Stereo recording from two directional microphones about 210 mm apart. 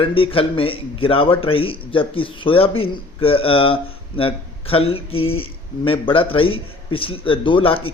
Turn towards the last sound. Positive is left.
turn(degrees=25)  # may be behind; listen again after turning